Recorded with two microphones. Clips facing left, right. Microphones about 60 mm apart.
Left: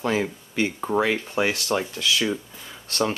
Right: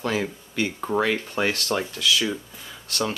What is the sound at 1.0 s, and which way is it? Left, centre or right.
Speech, centre.